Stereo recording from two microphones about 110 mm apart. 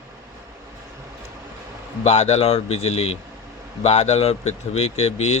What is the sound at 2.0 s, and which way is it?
Speech, 75° left (ahead or behind).